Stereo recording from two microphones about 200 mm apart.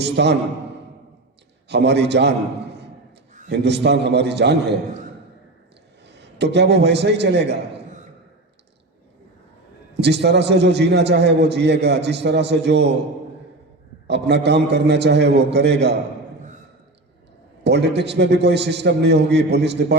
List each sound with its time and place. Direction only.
0.0 s a man's voice: 55° right (ahead or behind)
1.6 s a man's voice: 55° right (ahead or behind)
3.5 s a man's voice: 55° right (ahead or behind)
6.1 s a man's voice: 60° right (ahead or behind)
10.0 s a man's voice: 55° right (ahead or behind)
14.1 s a man's voice: 60° right (ahead or behind)
17.6 s a man's voice: 60° right (ahead or behind)